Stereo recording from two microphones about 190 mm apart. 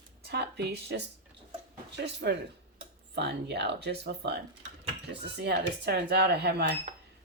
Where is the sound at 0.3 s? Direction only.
60° right (ahead or behind).